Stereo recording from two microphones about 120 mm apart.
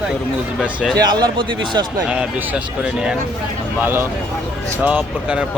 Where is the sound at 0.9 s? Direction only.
35° right (ahead or behind).